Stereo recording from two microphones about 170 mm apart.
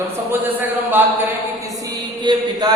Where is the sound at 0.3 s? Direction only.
10° right (ahead or behind).